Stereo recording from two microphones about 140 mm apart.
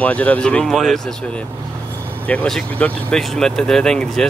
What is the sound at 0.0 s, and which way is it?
Speech, 10° left (ahead or behind).